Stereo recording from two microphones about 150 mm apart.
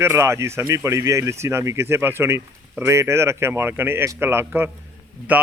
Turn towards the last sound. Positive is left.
turn(degrees=-10)  # may be behind; listen again after turning